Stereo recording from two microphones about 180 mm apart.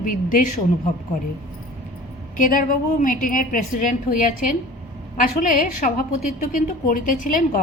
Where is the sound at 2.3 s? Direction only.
50° left (ahead or behind).